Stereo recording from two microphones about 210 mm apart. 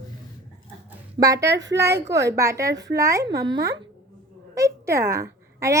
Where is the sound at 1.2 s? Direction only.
15° right (ahead or behind).